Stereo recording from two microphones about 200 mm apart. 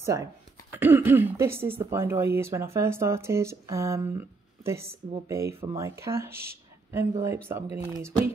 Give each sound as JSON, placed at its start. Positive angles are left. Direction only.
{"t": 0.0, "sound": "speech", "side_deg": -15}
{"t": 5.3, "sound": "speech", "side_deg": -15}